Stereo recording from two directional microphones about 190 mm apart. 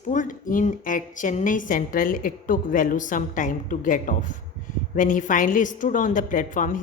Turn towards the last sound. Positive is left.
turn(degrees=45)  # may be behind; listen again after turning